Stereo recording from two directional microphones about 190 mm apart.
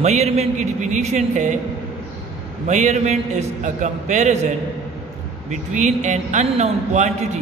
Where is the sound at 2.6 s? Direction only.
40° right (ahead or behind).